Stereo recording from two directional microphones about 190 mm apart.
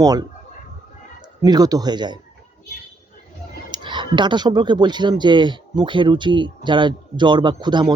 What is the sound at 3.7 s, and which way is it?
Speech, 25° right (ahead or behind).